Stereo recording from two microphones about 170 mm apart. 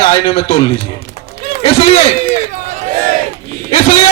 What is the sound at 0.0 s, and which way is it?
A man's voice, 35° left (ahead or behind).